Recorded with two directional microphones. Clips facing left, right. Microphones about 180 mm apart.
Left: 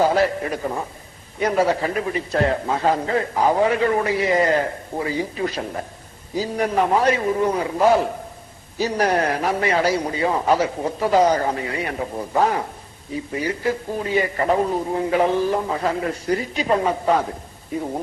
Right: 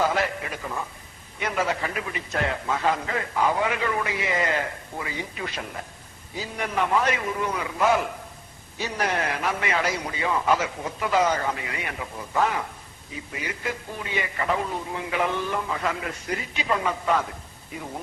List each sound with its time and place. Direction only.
0.0 s a man's voice: 35° left (ahead or behind)